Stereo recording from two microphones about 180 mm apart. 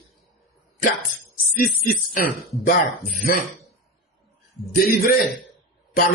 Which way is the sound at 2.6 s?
45° left (ahead or behind).